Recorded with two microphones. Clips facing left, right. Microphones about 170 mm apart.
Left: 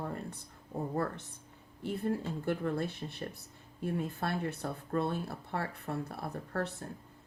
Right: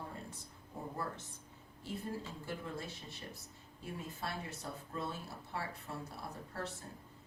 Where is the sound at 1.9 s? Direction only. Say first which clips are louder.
Left 9 dB; 60° left (ahead or behind).